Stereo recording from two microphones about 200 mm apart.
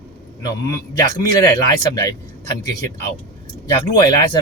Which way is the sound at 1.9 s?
15° left (ahead or behind).